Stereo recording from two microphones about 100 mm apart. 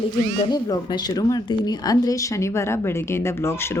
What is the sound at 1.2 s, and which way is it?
Speech, 40° left (ahead or behind).